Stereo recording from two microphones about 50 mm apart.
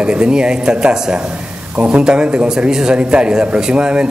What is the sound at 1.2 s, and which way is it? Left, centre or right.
A man's voice, right.